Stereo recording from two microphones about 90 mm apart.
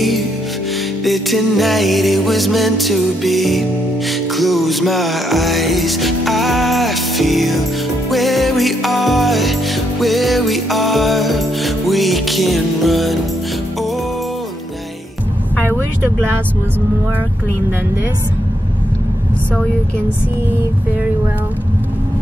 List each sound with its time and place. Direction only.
1.0 s music: centre (ahead or behind)